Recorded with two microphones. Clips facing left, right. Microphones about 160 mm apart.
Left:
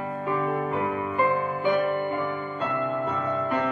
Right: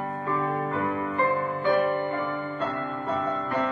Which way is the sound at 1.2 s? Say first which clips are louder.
Left 2 dB; 15° left (ahead or behind).